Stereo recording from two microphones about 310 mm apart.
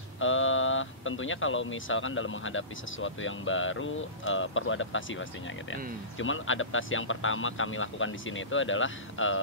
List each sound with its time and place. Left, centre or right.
0.2 s speech: left